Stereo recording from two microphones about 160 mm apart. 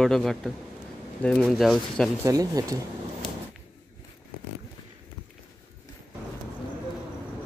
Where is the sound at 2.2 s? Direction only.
20° right (ahead or behind).